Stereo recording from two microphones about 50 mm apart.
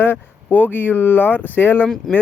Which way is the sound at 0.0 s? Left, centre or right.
Left.